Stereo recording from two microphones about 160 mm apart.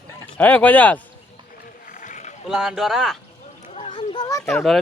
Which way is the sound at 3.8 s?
35° left (ahead or behind).